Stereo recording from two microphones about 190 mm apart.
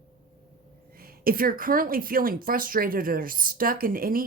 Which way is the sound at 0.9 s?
50° right (ahead or behind).